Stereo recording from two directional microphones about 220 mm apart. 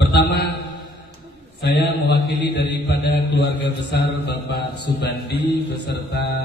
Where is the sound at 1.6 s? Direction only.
50° left (ahead or behind).